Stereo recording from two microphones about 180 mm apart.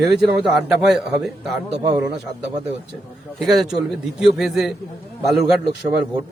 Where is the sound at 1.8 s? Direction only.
25° right (ahead or behind).